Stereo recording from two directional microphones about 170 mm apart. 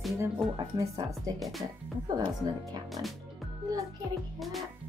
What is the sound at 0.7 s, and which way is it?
Speech, 20° right (ahead or behind).